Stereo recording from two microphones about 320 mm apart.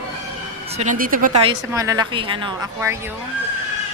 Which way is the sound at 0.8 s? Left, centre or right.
Right.